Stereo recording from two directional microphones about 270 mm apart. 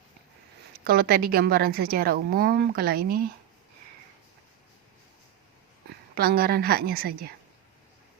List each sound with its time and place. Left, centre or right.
0.9 s a woman's voice: right
6.1 s a woman's voice: right